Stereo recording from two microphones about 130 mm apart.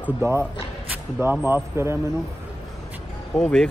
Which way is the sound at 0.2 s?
15° right (ahead or behind).